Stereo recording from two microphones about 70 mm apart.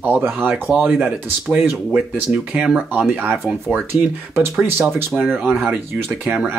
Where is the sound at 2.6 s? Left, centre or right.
Centre.